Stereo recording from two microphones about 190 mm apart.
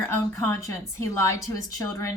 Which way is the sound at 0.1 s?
10° left (ahead or behind).